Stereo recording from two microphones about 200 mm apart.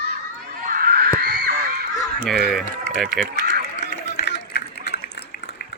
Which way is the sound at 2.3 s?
Centre (ahead or behind).